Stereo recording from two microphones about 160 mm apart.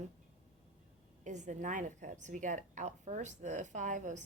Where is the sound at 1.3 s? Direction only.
50° right (ahead or behind).